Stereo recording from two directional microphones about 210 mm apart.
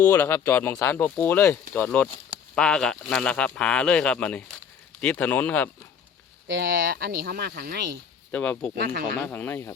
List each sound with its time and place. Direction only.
0.0 s speech: 10° left (ahead or behind)
6.5 s speech: 45° right (ahead or behind)
8.3 s speech: 5° left (ahead or behind)
8.8 s speech: 45° right (ahead or behind)
9.2 s speech: 10° left (ahead or behind)